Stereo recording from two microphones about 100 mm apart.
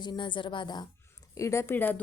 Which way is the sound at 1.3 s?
30° left (ahead or behind).